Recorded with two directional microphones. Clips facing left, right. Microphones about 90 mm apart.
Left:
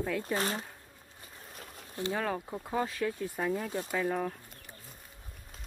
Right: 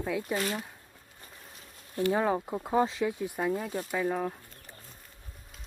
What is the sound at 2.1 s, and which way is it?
Speech, 20° right (ahead or behind).